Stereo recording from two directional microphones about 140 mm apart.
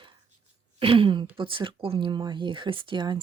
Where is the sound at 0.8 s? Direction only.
40° right (ahead or behind).